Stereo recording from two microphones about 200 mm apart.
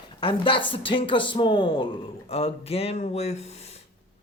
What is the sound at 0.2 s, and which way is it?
A woman's voice, 25° left (ahead or behind).